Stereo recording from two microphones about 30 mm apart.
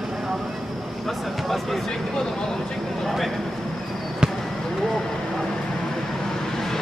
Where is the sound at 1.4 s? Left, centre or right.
Centre.